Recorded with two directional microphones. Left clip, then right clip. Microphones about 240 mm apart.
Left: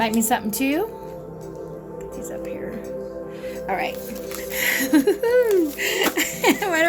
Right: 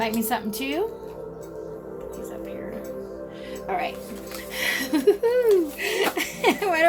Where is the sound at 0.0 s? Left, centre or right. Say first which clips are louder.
Left 4 dB; left.